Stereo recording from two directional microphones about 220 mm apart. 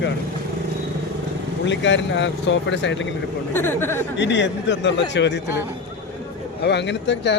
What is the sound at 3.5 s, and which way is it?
Speech, 10° left (ahead or behind).